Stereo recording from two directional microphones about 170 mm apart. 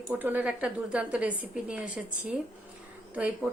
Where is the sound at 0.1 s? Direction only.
10° right (ahead or behind).